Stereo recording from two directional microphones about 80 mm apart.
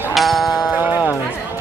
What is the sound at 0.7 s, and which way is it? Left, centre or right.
Speech, centre.